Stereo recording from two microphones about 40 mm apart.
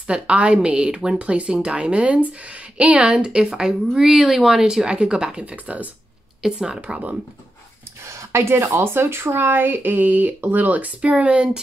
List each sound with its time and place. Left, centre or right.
0.0 s a woman's voice: right
3.3 s a woman's voice: centre
6.4 s speech: centre
8.3 s speech: right
11.0 s speech: right
11.3 s a woman's voice: right